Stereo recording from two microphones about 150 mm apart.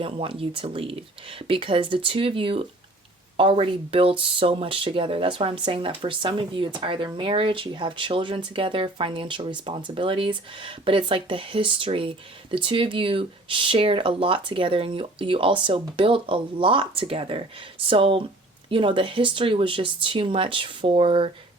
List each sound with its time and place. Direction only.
0.0 s speech: 35° right (ahead or behind)